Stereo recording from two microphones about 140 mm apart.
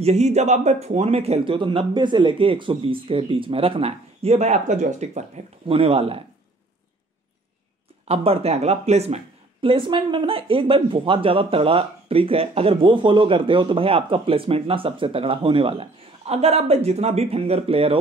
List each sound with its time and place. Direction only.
0.0 s a man's voice: 50° right (ahead or behind)
8.1 s speech: 45° right (ahead or behind)